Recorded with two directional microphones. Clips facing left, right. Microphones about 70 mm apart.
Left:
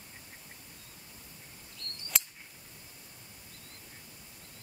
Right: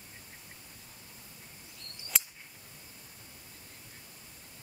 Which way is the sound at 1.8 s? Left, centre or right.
Centre.